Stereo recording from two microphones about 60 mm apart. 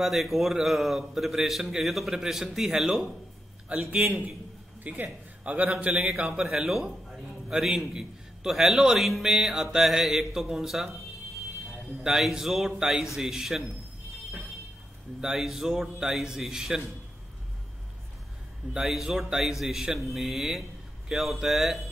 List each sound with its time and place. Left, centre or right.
0.0 s a man's voice: centre
3.7 s a man's voice: centre
6.4 s a man's voice: centre
12.0 s a man's voice: centre
15.1 s a man's voice: centre
18.7 s a man's voice: centre